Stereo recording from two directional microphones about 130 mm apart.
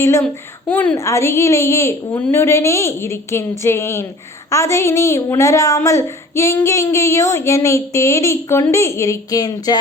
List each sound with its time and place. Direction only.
0.0 s a woman's voice: 20° left (ahead or behind)